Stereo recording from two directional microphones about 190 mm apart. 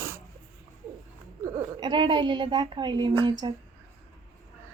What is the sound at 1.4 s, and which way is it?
Speech, 25° right (ahead or behind).